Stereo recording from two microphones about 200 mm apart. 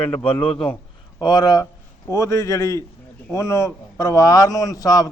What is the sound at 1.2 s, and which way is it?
A man's voice, 20° left (ahead or behind).